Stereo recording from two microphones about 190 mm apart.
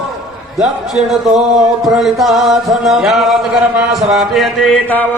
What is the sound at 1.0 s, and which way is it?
Music, centre (ahead or behind).